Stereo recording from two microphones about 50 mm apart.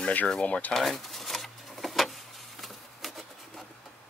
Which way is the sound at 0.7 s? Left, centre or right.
Centre.